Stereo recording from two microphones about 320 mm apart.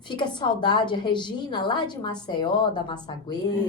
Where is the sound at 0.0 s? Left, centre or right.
Centre.